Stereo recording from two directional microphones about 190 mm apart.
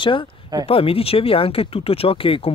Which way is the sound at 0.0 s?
25° left (ahead or behind).